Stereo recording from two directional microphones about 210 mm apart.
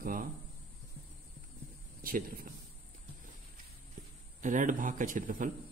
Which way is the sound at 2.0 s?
40° right (ahead or behind).